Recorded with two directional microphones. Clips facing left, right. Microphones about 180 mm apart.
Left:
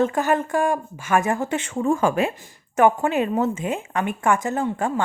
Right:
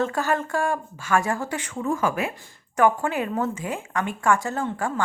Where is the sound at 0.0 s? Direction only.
20° left (ahead or behind).